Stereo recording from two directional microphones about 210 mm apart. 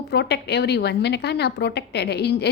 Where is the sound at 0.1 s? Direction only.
50° left (ahead or behind).